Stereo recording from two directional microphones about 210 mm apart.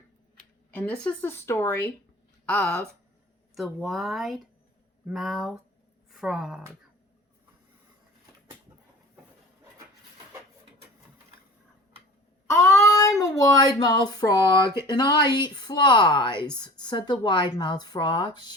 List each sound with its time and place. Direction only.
0.7 s a woman's voice: 10° left (ahead or behind)
12.8 s a sound: 15° left (ahead or behind)
13.2 s speech: 15° left (ahead or behind)